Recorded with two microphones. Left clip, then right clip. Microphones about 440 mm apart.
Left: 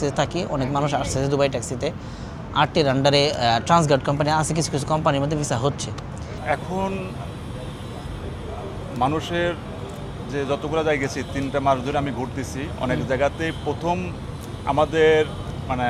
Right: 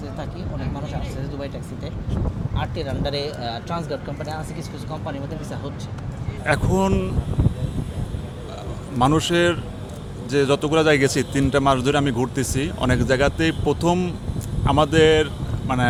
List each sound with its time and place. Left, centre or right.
0.9 s speech: left
2.6 s speech: left
6.4 s speech: right
9.0 s speech: right